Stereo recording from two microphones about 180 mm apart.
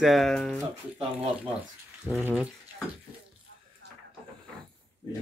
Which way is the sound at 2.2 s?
10° right (ahead or behind).